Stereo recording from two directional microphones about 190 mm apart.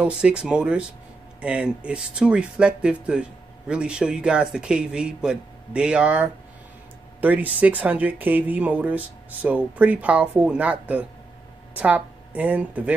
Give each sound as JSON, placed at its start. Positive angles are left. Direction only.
{"t": 0.0, "sound": "a woman's voice", "side_deg": -5}